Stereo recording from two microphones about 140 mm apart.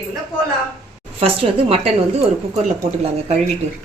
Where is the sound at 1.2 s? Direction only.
45° right (ahead or behind).